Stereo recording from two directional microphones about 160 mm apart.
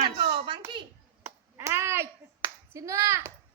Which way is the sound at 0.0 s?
30° right (ahead or behind).